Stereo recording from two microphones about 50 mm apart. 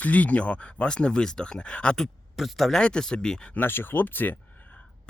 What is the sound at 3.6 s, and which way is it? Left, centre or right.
Speech, left.